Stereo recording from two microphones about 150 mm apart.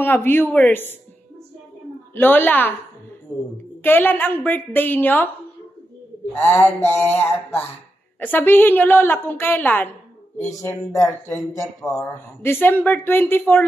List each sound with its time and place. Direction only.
0.0 s a woman's voice: 15° left (ahead or behind)
2.1 s a woman's voice: 15° left (ahead or behind)
3.8 s a woman's voice: 15° left (ahead or behind)
6.3 s a woman's voice: 15° left (ahead or behind)